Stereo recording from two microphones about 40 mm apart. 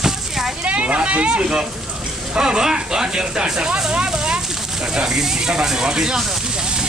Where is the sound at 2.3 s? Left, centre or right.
Centre.